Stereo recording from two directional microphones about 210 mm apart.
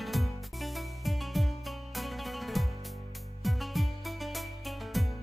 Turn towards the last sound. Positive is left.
turn(degrees=0)  # may be behind; listen again after turning